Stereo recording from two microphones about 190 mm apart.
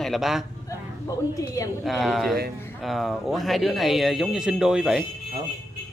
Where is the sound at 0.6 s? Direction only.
15° left (ahead or behind).